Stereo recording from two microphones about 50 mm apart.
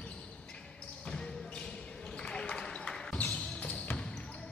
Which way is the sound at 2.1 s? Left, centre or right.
Centre.